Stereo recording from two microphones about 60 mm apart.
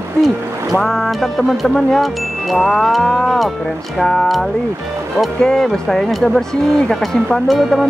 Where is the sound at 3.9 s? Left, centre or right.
Centre.